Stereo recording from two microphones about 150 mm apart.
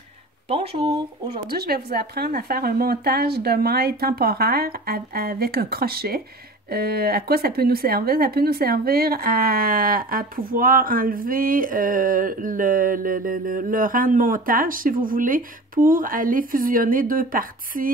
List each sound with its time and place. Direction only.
0.5 s speech: 40° right (ahead or behind)
1.5 s speech: 90° right; by 17.9 s 70° right (ahead or behind)